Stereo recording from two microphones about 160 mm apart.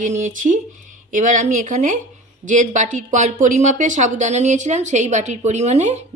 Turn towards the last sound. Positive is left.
turn(degrees=-45)  # may be behind; listen again after turning